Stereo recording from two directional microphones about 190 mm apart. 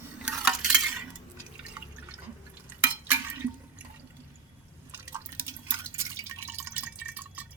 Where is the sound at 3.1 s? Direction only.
10° right (ahead or behind).